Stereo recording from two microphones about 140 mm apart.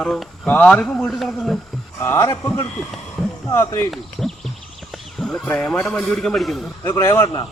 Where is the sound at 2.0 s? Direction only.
20° left (ahead or behind).